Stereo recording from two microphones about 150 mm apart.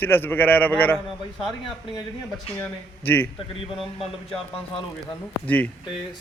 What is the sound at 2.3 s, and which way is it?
Speech, 10° left (ahead or behind).